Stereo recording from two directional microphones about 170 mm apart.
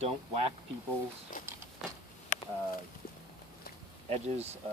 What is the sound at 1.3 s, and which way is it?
Speech, 55° left (ahead or behind).